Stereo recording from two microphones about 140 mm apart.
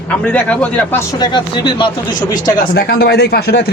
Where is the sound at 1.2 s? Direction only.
35° left (ahead or behind).